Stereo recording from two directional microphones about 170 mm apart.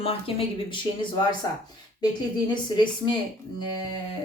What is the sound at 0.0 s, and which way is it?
Speech, 35° left (ahead or behind).